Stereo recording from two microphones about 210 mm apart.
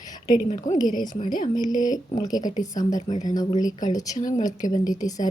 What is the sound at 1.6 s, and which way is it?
Speech, 20° left (ahead or behind).